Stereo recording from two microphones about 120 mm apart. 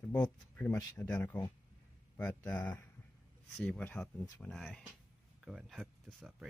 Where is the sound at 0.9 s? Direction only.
15° left (ahead or behind).